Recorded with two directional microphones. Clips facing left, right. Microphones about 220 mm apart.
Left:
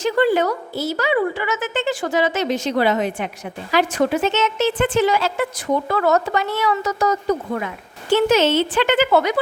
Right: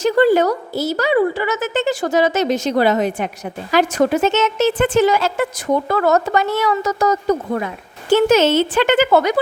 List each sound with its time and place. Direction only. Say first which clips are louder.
0.0 s a woman's voice: right 4 dB; 40° right (ahead or behind)